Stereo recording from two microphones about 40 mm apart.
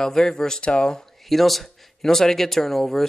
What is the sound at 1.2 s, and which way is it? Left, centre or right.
Speech, centre.